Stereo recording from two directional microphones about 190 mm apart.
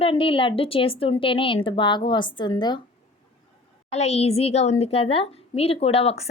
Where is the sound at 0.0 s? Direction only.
30° left (ahead or behind).